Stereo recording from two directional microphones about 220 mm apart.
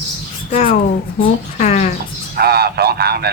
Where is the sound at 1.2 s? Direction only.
35° left (ahead or behind).